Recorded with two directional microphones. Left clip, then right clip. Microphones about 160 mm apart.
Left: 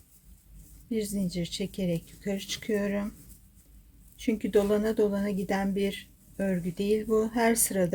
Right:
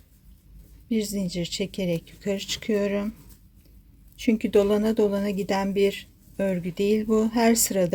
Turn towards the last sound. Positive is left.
turn(degrees=-25)  # may be behind; listen again after turning